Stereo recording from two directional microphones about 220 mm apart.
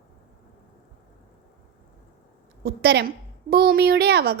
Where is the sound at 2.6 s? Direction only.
45° right (ahead or behind).